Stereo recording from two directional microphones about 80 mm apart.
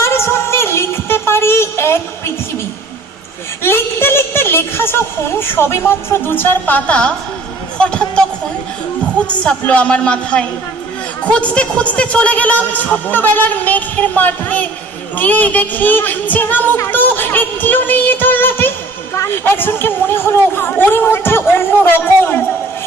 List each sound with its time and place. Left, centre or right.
0.0 s music: left
3.6 s a woman's voice: left; by 8.2 s centre
9.2 s speech: centre
11.2 s music: centre
19.1 s a sound: left
19.5 s music: left